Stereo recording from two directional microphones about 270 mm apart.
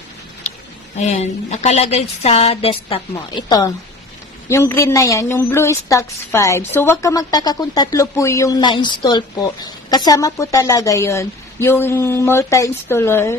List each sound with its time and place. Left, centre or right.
0.9 s a woman's voice: left; by 13.4 s centre